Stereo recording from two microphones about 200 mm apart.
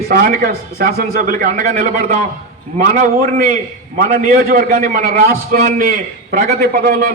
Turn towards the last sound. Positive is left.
turn(degrees=-50)  # may be behind; listen again after turning